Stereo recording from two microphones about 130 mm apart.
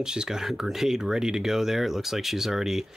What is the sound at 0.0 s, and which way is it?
Speech, 5° right (ahead or behind).